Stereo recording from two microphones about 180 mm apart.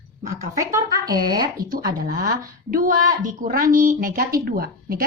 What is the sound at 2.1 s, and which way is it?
A woman's voice, 55° right (ahead or behind).